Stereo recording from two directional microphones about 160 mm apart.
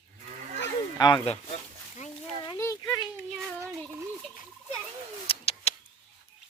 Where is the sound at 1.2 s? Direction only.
45° left (ahead or behind).